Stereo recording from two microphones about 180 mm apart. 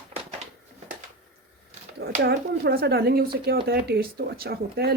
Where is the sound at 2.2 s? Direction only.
65° right (ahead or behind).